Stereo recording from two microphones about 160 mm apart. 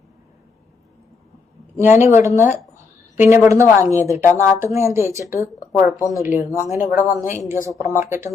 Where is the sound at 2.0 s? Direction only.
15° right (ahead or behind).